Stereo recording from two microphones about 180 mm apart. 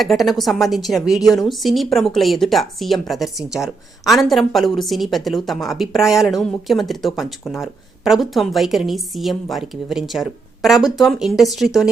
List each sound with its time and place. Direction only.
0.0 s a woman's voice: centre (ahead or behind)